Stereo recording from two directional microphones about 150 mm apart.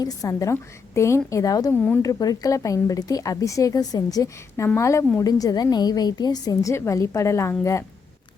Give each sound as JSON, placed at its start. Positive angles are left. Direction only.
{"t": 0.0, "sound": "a woman's voice", "side_deg": 25}